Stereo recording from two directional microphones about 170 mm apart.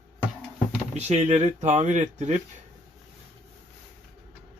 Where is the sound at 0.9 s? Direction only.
40° right (ahead or behind).